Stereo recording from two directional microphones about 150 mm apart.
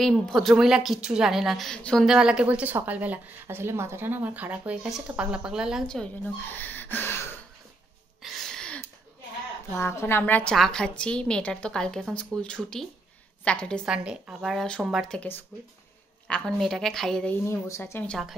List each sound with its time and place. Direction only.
0.0 s a woman's voice: centre (ahead or behind)
2.0 s a woman's voice: 5° right (ahead or behind); by 7.2 s 15° left (ahead or behind)
8.2 s a sound: centre (ahead or behind)
9.8 s a woman's voice: 15° left (ahead or behind)
13.8 s a woman's voice: 5° right (ahead or behind)
17.5 s speech: 20° left (ahead or behind)
18.0 s a woman's voice: centre (ahead or behind)